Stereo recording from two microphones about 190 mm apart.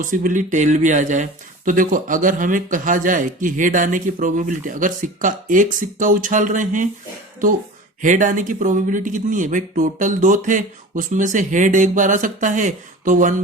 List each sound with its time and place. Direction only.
0.0 s speech: 45° right (ahead or behind)
8.0 s speech: 40° right (ahead or behind)